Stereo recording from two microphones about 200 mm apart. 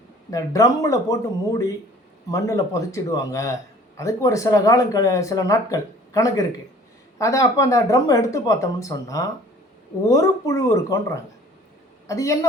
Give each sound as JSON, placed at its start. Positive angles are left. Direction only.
{"t": 0.3, "sound": "a man's voice", "side_deg": 15}